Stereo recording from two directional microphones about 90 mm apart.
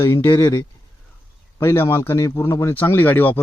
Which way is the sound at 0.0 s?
30° left (ahead or behind).